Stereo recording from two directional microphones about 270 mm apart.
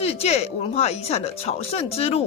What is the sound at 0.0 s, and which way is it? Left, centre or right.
Speech, left.